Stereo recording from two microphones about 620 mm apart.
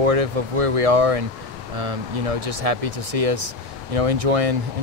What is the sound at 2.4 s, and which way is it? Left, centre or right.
Speech, right.